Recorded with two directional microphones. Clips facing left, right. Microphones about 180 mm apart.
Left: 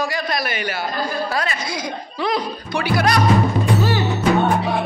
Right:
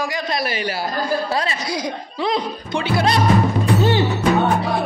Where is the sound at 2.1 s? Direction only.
25° right (ahead or behind).